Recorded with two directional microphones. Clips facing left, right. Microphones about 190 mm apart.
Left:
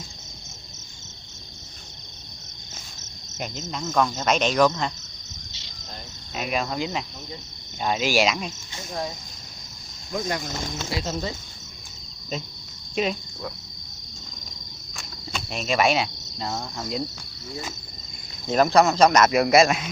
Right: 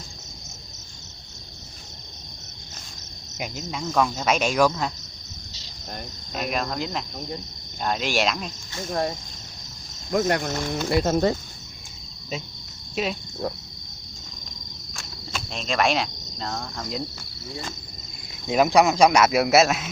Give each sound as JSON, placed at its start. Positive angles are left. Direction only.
{"t": 3.3, "sound": "cricket", "side_deg": -10}
{"t": 3.9, "sound": "speech", "side_deg": 0}
{"t": 6.3, "sound": "speech", "side_deg": 0}
{"t": 10.1, "sound": "speech", "side_deg": -70}
{"t": 13.0, "sound": "speech", "side_deg": -5}
{"t": 15.0, "sound": "cricket", "side_deg": 0}
{"t": 18.5, "sound": "speech", "side_deg": -10}